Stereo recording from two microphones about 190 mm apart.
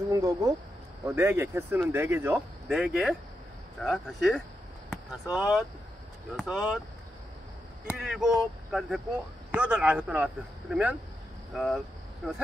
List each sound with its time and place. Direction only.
0.1 s speech: 15° right (ahead or behind)
2.7 s speech: centre (ahead or behind)
7.8 s speech: 5° right (ahead or behind)